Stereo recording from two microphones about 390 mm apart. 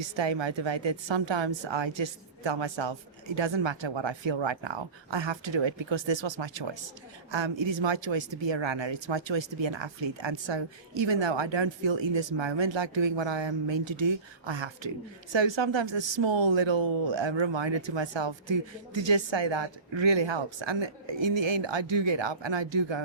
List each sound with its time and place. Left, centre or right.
0.0 s speech: right